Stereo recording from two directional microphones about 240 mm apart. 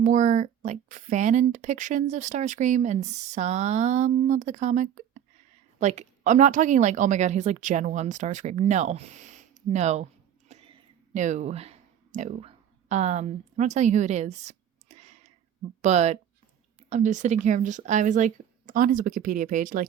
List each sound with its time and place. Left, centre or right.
0.0 s speech: right
10.5 s a sound: right
15.8 s speech: right